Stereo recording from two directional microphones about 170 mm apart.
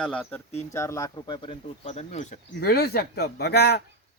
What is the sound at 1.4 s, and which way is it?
Speech, 40° left (ahead or behind).